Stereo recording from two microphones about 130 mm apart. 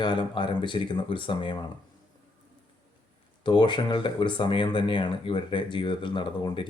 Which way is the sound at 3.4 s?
35° left (ahead or behind).